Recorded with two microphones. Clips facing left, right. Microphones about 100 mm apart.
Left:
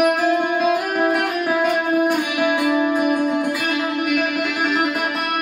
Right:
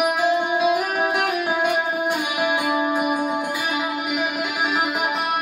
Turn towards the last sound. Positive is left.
turn(degrees=-5)  # may be behind; listen again after turning